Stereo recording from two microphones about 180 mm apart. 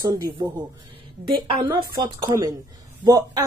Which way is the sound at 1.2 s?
25° right (ahead or behind).